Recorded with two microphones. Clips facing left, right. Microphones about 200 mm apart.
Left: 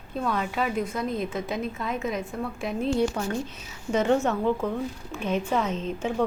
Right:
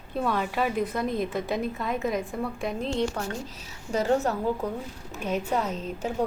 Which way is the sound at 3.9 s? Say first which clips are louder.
Left 2 dB; 35° right (ahead or behind).